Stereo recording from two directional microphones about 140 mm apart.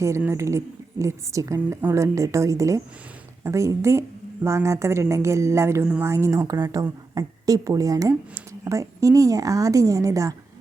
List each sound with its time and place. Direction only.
0.2 s speech: 20° right (ahead or behind)